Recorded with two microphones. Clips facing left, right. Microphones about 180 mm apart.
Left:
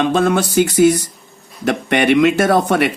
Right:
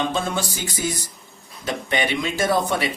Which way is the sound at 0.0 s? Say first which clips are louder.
Left 9 dB; 65° left (ahead or behind).